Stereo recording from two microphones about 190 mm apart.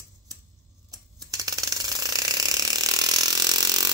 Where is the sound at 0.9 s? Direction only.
20° right (ahead or behind).